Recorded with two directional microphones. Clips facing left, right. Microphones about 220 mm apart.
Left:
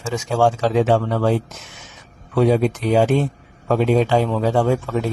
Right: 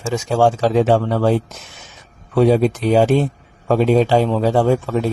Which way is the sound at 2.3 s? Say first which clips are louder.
Right 3 dB; 30° right (ahead or behind).